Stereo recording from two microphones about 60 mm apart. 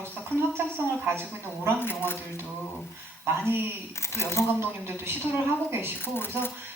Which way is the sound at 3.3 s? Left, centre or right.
Right.